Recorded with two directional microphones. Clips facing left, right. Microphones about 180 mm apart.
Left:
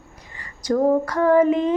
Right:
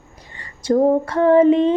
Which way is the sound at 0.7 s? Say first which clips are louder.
Right 3 dB; 25° right (ahead or behind).